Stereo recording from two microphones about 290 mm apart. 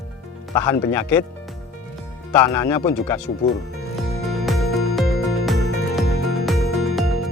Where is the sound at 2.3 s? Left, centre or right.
Centre.